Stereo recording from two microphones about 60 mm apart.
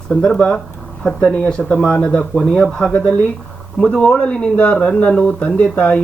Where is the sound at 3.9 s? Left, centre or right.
Centre.